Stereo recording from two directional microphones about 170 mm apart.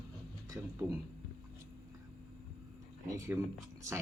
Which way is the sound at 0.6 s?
10° right (ahead or behind).